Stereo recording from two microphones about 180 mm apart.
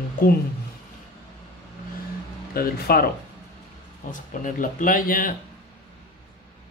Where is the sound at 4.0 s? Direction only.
45° left (ahead or behind).